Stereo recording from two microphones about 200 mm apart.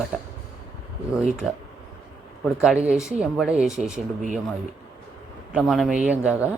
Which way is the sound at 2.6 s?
5° right (ahead or behind).